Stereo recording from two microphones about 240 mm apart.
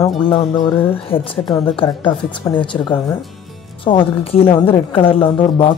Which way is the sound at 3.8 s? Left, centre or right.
Left.